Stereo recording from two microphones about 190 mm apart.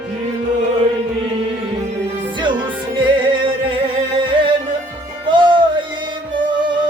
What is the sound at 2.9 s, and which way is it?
Music, 25° right (ahead or behind).